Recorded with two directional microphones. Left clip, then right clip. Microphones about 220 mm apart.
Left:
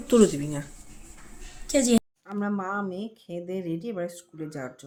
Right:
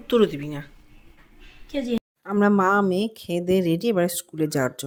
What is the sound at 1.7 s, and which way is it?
Speech, 20° left (ahead or behind).